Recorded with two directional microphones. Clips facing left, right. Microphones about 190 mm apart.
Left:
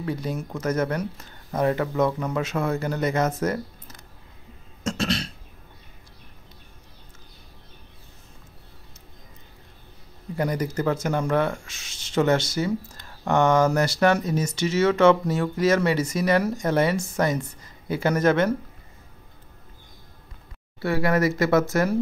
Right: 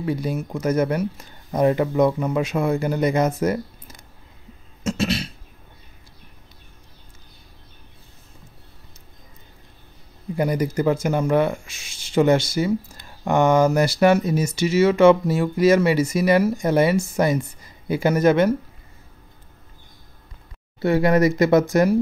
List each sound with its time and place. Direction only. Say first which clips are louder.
0.0 s speech: right 4 dB; 10° right (ahead or behind)
4.8 s cough: right 3 dB; 5° right (ahead or behind)
10.3 s speech: right 4 dB; 10° right (ahead or behind)
20.8 s speech: right 5 dB; 20° right (ahead or behind)